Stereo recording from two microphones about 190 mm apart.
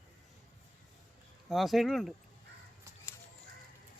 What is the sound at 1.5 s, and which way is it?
Speech, centre (ahead or behind).